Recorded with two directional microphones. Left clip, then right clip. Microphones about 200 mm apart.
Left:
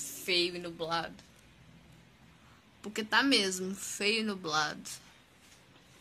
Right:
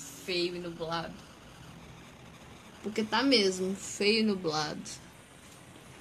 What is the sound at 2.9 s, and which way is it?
Speech, 25° left (ahead or behind).